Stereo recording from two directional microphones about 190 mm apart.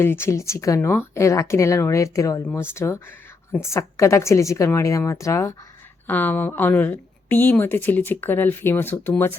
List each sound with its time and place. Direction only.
0.0 s speech: 10° left (ahead or behind)